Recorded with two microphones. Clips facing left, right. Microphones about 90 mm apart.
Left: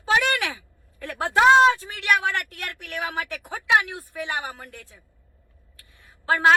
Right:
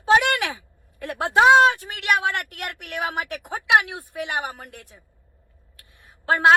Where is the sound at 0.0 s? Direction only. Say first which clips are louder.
Right 4 dB; 20° right (ahead or behind).